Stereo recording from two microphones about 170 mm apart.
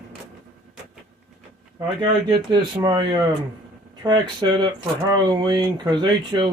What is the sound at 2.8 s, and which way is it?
Speech, 20° right (ahead or behind).